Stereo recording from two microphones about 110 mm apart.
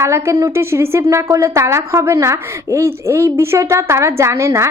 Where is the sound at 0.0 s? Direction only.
25° right (ahead or behind).